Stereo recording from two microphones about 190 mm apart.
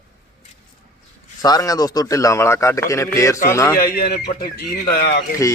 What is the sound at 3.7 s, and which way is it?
Speech, 50° left (ahead or behind).